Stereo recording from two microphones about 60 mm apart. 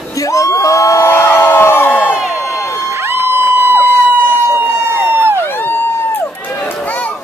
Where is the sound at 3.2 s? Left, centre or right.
Right.